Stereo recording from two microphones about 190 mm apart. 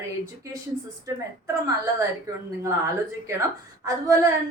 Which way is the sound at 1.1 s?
15° right (ahead or behind).